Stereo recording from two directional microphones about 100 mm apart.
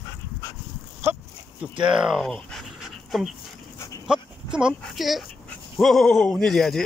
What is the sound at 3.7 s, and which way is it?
Dog, 30° left (ahead or behind).